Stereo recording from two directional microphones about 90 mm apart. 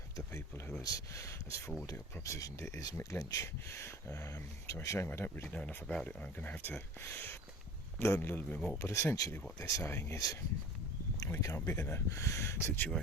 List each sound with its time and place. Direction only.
0.8 s a man's voice: 40° left (ahead or behind); by 5.5 s 25° left (ahead or behind)
5.5 s a man's voice: 15° left (ahead or behind)
8.8 s speech: 30° left (ahead or behind)
9.8 s a man's voice: 30° left (ahead or behind)
11.3 s speech: 30° left (ahead or behind)